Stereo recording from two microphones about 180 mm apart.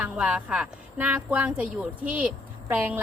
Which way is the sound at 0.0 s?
5° right (ahead or behind).